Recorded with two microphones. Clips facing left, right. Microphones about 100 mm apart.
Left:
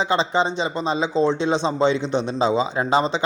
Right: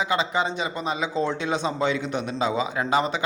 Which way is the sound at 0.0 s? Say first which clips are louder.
Left 4 dB; 30° left (ahead or behind).